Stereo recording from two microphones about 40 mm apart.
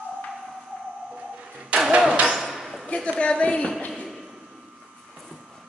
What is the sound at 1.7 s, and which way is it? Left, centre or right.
Vehicle, right.